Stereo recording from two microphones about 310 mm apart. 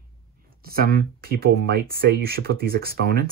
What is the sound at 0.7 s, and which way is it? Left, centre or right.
Speech, right.